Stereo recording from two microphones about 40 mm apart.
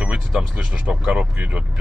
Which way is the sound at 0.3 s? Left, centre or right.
Centre.